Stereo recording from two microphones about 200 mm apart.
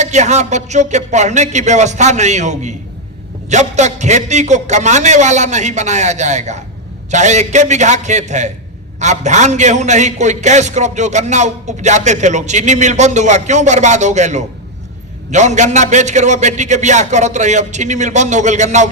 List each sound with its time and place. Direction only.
0.0 s a man's voice: 35° right (ahead or behind)